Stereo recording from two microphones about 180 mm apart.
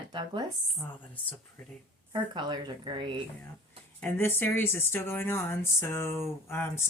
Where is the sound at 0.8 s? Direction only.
10° left (ahead or behind).